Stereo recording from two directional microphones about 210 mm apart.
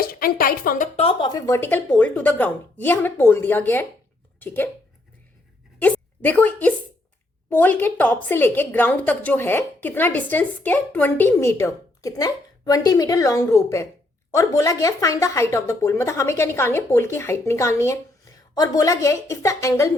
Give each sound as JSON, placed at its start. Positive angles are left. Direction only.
{"t": 0.0, "sound": "music", "side_deg": 45}
{"t": 0.9, "sound": "a woman's voice", "side_deg": 25}
{"t": 5.8, "sound": "a woman's voice", "side_deg": 10}